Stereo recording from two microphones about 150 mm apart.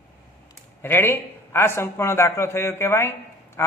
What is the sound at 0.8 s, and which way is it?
A man's voice, 15° left (ahead or behind).